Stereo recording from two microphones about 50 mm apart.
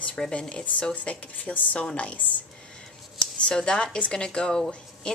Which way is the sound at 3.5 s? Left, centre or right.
Centre.